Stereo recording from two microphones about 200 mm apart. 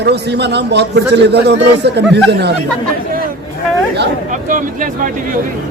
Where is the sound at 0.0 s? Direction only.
55° right (ahead or behind).